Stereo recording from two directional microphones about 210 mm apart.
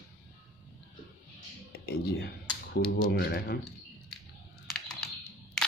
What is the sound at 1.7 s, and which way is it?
Speech, 50° left (ahead or behind).